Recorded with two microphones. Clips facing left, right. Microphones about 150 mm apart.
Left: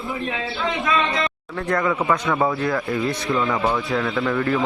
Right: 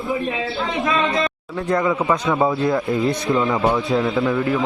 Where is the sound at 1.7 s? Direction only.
15° right (ahead or behind).